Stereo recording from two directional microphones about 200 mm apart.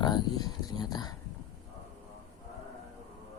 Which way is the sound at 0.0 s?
20° left (ahead or behind).